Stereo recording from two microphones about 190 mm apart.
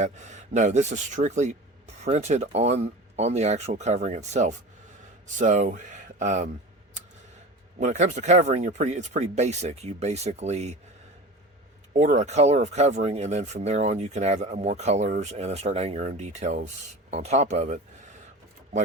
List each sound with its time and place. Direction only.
0.0 s speech: 40° right (ahead or behind)
7.8 s speech: 40° right (ahead or behind)
11.9 s speech: 40° right (ahead or behind)